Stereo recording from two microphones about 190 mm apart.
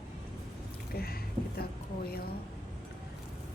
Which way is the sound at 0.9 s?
55° left (ahead or behind).